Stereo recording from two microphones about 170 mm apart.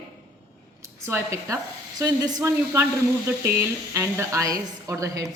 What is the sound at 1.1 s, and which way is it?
A woman's voice, 15° right (ahead or behind).